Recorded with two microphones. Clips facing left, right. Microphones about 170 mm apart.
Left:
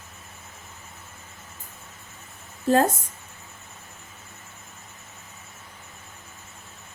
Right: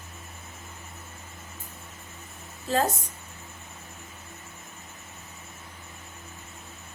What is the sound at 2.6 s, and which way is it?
Speech, 50° left (ahead or behind).